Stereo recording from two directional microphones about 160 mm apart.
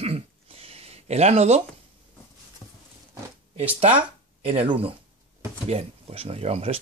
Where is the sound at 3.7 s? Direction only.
40° right (ahead or behind).